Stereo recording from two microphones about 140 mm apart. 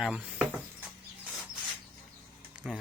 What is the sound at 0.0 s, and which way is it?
Dishes, 5° right (ahead or behind).